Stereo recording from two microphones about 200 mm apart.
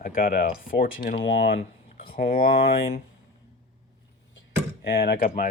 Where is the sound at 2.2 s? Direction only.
50° left (ahead or behind).